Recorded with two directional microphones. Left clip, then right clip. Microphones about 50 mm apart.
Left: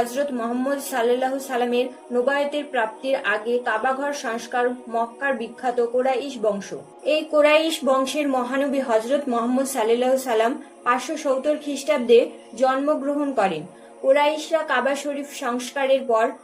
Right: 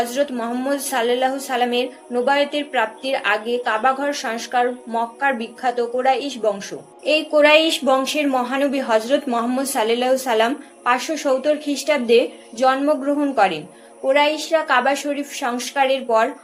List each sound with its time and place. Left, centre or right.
0.1 s a woman's voice: centre